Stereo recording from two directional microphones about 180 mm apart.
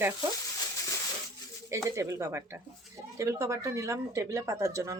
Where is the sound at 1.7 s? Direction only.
15° right (ahead or behind).